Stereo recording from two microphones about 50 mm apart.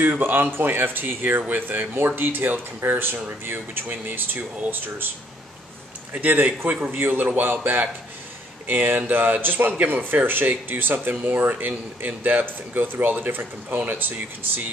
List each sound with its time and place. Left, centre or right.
0.0 s speech: right
6.2 s speech: right
6.7 s a man's voice: right
7.0 s speech: right